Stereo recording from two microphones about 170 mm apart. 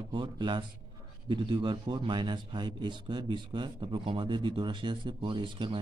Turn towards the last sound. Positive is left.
turn(degrees=-30)  # may be behind; listen again after turning